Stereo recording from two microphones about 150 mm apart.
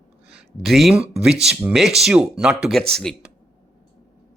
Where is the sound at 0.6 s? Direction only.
Centre (ahead or behind).